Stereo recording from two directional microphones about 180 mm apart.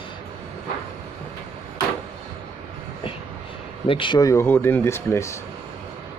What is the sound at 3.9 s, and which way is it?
Speech, 25° left (ahead or behind).